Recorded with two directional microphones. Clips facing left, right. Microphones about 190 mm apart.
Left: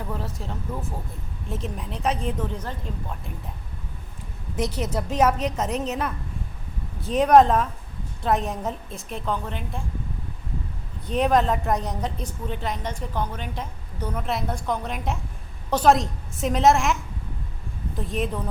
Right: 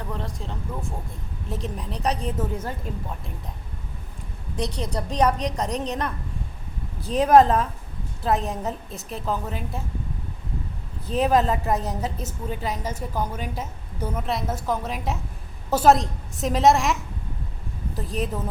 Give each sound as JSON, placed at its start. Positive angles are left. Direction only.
{"t": 0.1, "sound": "a woman's voice", "side_deg": 5}
{"t": 4.5, "sound": "a woman's voice", "side_deg": 5}
{"t": 11.0, "sound": "a woman's voice", "side_deg": 0}